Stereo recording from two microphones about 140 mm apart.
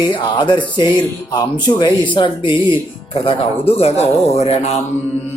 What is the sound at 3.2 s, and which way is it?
Speech, 45° left (ahead or behind).